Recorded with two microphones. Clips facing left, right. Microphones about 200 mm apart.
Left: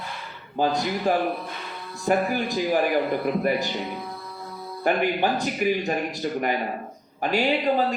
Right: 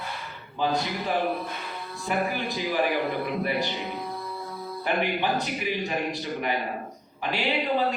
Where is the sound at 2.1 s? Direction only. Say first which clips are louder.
Left 6 dB; 45° left (ahead or behind).